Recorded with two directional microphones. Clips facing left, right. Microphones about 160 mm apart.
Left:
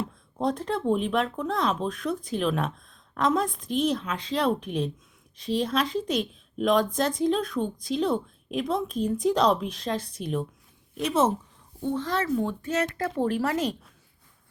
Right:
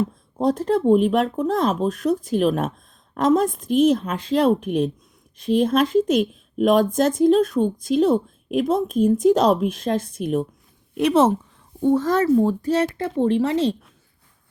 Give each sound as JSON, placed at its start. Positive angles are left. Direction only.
{"t": 0.0, "sound": "speech", "side_deg": -40}
{"t": 10.9, "sound": "speech", "side_deg": -65}
{"t": 11.8, "sound": "speech", "side_deg": -45}